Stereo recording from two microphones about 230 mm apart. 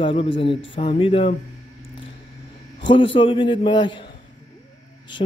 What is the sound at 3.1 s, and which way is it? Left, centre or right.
Speech, left.